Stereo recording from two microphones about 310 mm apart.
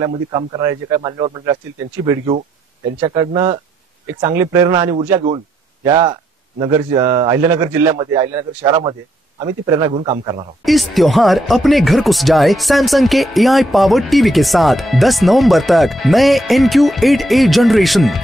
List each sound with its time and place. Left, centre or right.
0.0 s speech: centre
10.6 s speech: centre